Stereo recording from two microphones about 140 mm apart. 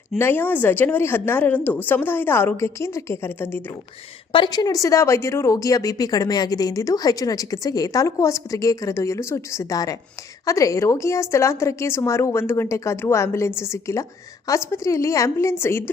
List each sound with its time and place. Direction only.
0.2 s speech: 15° left (ahead or behind)
4.3 s speech: 30° left (ahead or behind)